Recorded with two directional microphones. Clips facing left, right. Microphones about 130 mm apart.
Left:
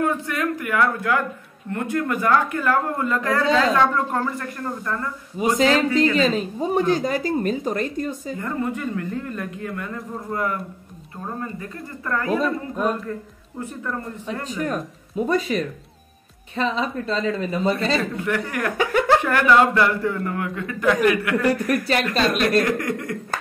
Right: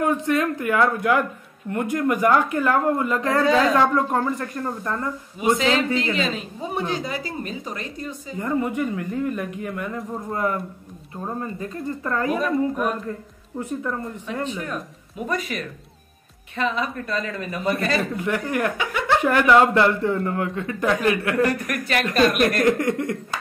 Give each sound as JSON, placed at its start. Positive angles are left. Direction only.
{"t": 0.0, "sound": "a woman's voice", "side_deg": -20}
{"t": 5.4, "sound": "speech", "side_deg": 40}
{"t": 8.4, "sound": "a woman's voice", "side_deg": -15}
{"t": 11.6, "sound": "speech", "side_deg": -25}
{"t": 12.4, "sound": "speech", "side_deg": 30}
{"t": 14.6, "sound": "speech", "side_deg": 35}
{"t": 18.1, "sound": "speech", "side_deg": -20}
{"t": 18.8, "sound": "laughter", "side_deg": 45}
{"t": 19.2, "sound": "speech", "side_deg": -20}
{"t": 21.6, "sound": "speech", "side_deg": 35}
{"t": 22.7, "sound": "speech", "side_deg": -25}